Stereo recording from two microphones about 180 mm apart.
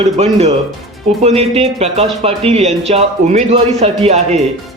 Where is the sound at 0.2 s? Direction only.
35° right (ahead or behind).